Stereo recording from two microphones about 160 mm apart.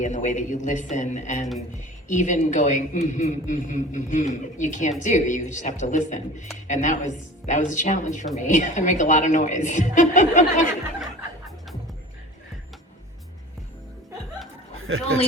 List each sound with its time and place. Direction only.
0.0 s a man's voice: 50° left (ahead or behind)